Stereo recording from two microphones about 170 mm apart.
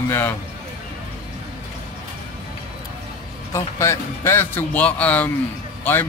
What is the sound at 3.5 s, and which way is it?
Speech, 15° left (ahead or behind).